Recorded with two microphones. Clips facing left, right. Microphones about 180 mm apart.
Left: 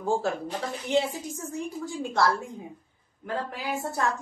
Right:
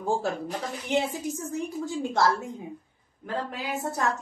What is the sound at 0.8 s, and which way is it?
A woman's voice, 20° right (ahead or behind).